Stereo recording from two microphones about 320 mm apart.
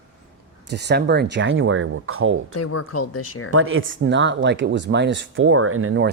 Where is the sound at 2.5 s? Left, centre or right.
Left.